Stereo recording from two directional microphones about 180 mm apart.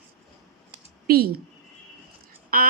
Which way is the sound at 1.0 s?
55° right (ahead or behind).